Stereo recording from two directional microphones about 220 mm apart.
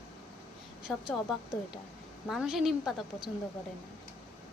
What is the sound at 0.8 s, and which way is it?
A woman's voice, centre (ahead or behind).